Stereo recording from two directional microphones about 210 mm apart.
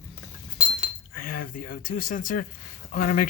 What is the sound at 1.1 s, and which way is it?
Speech, 45° left (ahead or behind).